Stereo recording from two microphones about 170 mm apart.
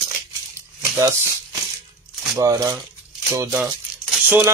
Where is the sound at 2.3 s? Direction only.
20° right (ahead or behind).